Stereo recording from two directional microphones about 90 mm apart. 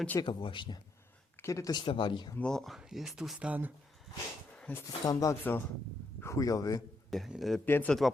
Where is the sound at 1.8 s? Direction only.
65° left (ahead or behind).